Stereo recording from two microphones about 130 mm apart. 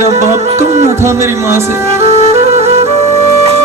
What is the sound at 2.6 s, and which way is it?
Music, 55° right (ahead or behind).